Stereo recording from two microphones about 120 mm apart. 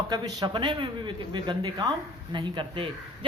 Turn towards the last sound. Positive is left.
turn(degrees=-45)  # may be behind; listen again after turning